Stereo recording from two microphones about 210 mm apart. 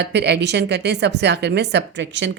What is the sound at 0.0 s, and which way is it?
A woman's voice, 55° right (ahead or behind).